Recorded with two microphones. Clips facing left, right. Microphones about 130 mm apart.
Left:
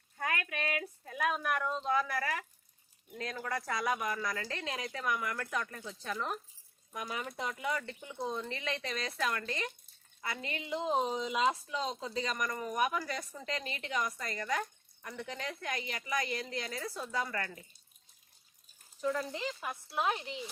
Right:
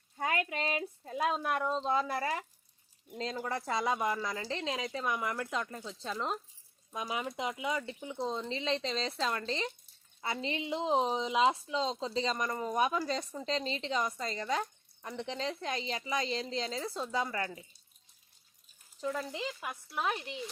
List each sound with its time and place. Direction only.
0.2 s a sound: 20° right (ahead or behind)
3.2 s speech: 25° right (ahead or behind)
18.9 s speech: 25° right (ahead or behind)
19.9 s speech: 25° left (ahead or behind)